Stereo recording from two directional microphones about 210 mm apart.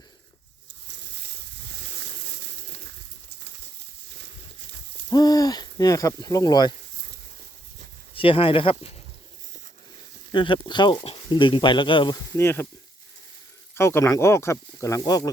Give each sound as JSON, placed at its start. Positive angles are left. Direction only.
{"t": 0.9, "sound": "a sound", "side_deg": -55}
{"t": 5.0, "sound": "speech", "side_deg": 20}
{"t": 8.1, "sound": "speech", "side_deg": 25}
{"t": 10.3, "sound": "speech", "side_deg": 25}
{"t": 13.7, "sound": "speech", "side_deg": 10}